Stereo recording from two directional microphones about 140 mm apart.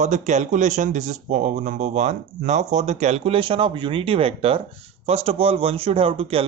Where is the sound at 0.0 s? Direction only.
55° right (ahead or behind).